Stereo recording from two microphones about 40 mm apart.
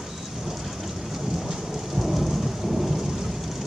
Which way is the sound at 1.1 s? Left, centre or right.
Centre.